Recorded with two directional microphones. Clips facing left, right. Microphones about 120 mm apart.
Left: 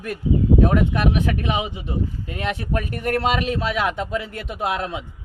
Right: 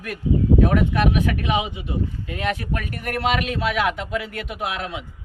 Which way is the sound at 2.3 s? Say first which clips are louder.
Left 1 dB; 25° left (ahead or behind).